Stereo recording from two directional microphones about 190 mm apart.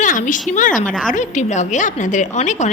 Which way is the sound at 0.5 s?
45° left (ahead or behind).